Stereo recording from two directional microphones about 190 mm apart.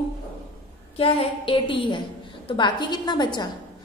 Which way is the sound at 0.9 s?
30° left (ahead or behind).